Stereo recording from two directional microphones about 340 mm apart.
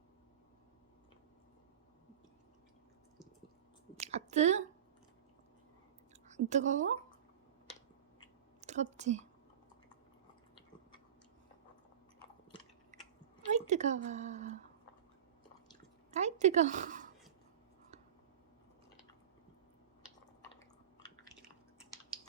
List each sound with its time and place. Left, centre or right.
4.0 s a sound: centre
6.2 s speech: centre
8.6 s a woman's voice: centre
12.9 s chewing: right
13.5 s a woman's voice: centre
16.1 s a woman's voice: centre
20.6 s a sound: centre